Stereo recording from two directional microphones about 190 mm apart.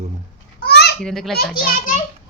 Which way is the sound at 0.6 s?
60° left (ahead or behind).